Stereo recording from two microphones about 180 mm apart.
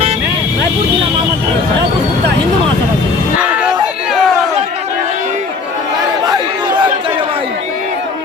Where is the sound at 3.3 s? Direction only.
5° right (ahead or behind).